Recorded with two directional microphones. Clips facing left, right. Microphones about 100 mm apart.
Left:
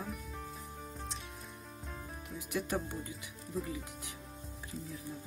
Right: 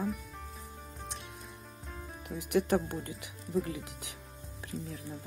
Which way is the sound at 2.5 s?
60° right (ahead or behind).